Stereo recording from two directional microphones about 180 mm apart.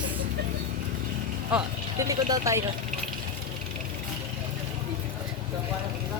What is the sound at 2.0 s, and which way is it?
Speech, 20° right (ahead or behind).